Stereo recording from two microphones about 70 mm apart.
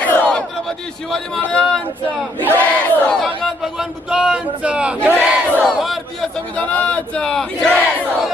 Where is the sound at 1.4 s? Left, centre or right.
Left.